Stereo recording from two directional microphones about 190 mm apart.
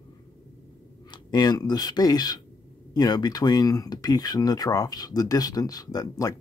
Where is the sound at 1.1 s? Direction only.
20° left (ahead or behind).